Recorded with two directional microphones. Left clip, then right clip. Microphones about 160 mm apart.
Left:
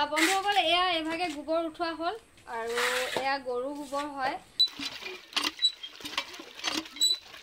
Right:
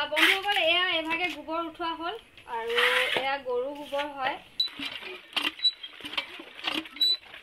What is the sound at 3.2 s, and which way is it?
Speech, 55° left (ahead or behind).